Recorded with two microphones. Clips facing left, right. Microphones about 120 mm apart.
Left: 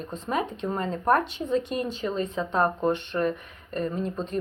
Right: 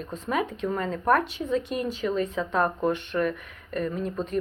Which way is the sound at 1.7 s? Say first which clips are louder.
Even; 5° right (ahead or behind).